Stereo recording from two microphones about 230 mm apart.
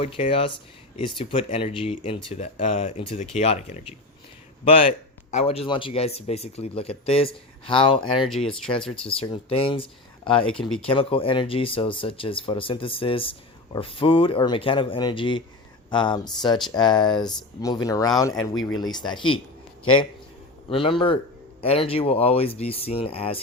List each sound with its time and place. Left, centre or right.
0.0 s speech: left
5.3 s speech: left
8.3 s speech: centre
9.0 s speech: left
10.5 s speech: centre
10.8 s speech: left
20.7 s speech: left